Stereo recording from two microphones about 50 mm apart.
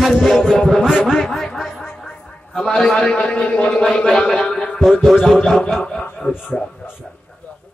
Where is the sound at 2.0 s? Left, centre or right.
Centre.